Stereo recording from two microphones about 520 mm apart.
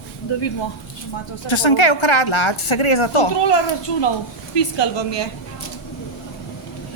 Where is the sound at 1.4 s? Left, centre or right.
Left.